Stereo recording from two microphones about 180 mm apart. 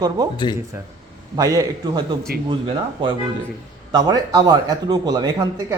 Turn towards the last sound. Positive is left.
turn(degrees=-20)  # may be behind; listen again after turning